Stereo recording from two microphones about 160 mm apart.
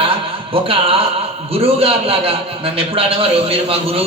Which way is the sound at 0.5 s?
35° right (ahead or behind).